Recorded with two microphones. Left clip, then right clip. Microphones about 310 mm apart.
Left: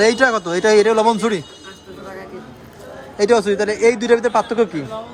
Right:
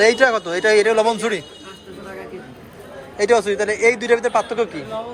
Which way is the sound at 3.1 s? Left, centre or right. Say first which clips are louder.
Left 1 dB; centre.